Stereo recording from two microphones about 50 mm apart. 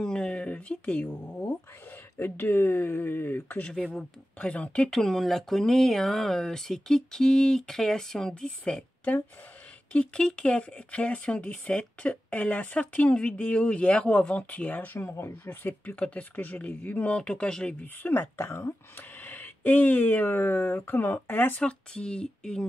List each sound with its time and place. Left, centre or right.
0.0 s a sound: centre
2.1 s speech: left
4.4 s speech: left
4.9 s speech: centre
10.1 s speech: centre
15.0 s speech: left
16.0 s speech: left
17.1 s speech: left
18.0 s speech: left
18.4 s speech: left
18.9 s speech: left
21.5 s speech: left